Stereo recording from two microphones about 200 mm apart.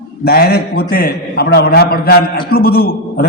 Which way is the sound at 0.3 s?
50° left (ahead or behind).